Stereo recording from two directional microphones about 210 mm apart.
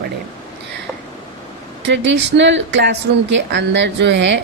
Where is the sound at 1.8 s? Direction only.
55° right (ahead or behind).